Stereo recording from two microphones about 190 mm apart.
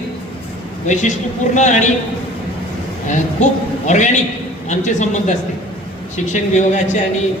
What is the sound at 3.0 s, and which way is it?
A woman's voice, 40° left (ahead or behind).